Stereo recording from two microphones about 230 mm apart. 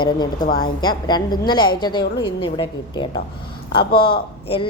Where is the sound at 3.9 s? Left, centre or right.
Left.